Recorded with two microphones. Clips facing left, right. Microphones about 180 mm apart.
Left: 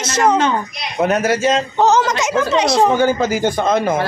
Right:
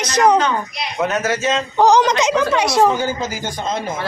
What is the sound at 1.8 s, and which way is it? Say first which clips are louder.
Speech: right 2 dB; 15° right (ahead or behind).